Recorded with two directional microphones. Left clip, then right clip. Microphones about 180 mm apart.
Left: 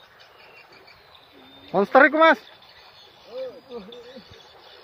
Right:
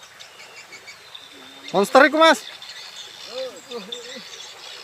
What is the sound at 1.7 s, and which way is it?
Speech, 5° right (ahead or behind).